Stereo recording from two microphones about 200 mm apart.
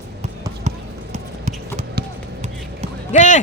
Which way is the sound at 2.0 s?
55° right (ahead or behind).